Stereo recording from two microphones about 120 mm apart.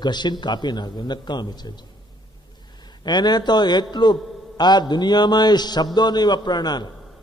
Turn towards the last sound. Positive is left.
turn(degrees=35)  # may be behind; listen again after turning